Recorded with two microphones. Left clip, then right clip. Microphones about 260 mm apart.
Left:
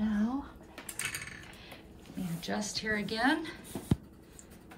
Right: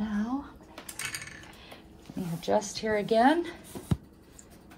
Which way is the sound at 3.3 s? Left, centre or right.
Centre.